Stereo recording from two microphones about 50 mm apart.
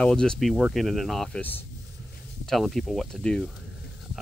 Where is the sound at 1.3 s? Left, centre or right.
Left.